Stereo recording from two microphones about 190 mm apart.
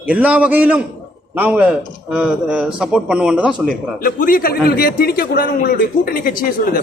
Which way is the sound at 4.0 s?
45° left (ahead or behind).